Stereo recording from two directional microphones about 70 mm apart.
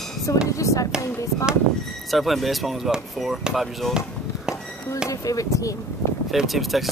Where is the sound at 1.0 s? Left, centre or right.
Left.